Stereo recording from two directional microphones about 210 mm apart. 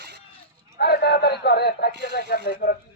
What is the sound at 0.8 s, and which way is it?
Speech, 50° left (ahead or behind).